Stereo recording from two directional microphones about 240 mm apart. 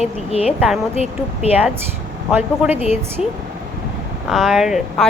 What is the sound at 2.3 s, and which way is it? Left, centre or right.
Speech, centre.